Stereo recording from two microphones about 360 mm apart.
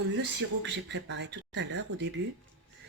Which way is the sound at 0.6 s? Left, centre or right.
Right.